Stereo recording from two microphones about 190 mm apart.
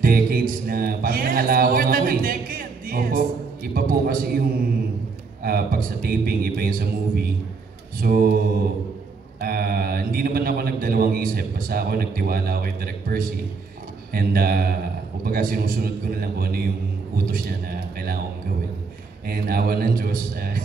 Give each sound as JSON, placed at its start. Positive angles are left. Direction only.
{"t": 0.0, "sound": "a man's voice", "side_deg": -50}
{"t": 5.4, "sound": "a man's voice", "side_deg": -50}
{"t": 9.4, "sound": "a man's voice", "side_deg": -55}
{"t": 19.2, "sound": "a man's voice", "side_deg": -55}